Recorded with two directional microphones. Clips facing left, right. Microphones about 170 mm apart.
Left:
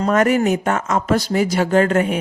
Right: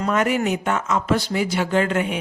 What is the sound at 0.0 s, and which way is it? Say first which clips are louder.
A woman's voice: left 5 dB; 45° left (ahead or behind).